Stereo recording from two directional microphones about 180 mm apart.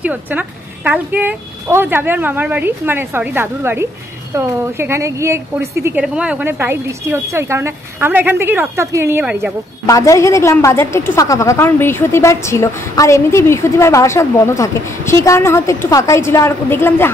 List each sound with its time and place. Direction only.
0.0 s a woman's voice: 10° right (ahead or behind)
9.8 s a woman's voice: 20° left (ahead or behind)